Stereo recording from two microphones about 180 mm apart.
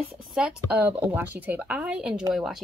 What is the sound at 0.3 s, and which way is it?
Speech, 5° right (ahead or behind).